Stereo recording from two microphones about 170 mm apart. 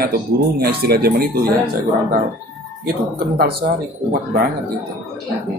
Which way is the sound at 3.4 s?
65° right (ahead or behind).